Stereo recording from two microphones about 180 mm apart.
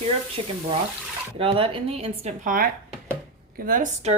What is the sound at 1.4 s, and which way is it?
Speech, 30° right (ahead or behind).